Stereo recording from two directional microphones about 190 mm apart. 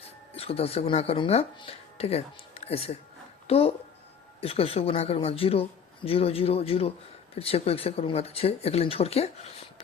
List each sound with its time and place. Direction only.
0.0 s speech: 30° left (ahead or behind)